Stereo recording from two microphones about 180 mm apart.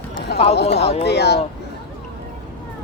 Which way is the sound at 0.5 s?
70° left (ahead or behind).